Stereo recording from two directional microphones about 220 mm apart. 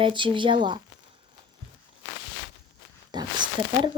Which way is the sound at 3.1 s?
20° right (ahead or behind).